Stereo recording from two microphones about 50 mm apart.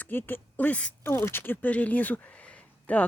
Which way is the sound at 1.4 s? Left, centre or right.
Left.